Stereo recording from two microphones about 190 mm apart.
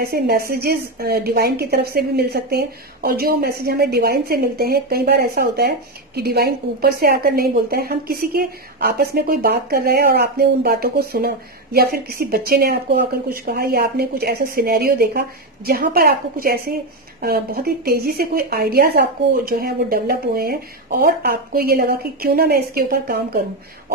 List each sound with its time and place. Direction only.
0.0 s a woman's voice: 55° right (ahead or behind)